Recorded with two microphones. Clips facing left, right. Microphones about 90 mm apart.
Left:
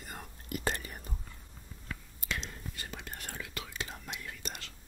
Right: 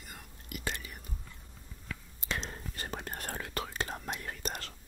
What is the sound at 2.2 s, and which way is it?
Whispering, 35° right (ahead or behind).